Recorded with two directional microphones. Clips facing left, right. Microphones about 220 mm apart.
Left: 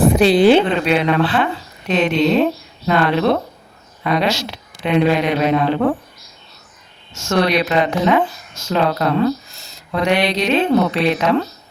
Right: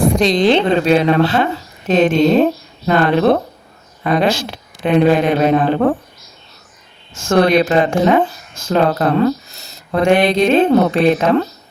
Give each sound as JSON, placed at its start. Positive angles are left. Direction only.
{"t": 0.2, "sound": "a woman's voice", "side_deg": 5}
{"t": 0.7, "sound": "speech", "side_deg": -40}
{"t": 7.1, "sound": "speech", "side_deg": -50}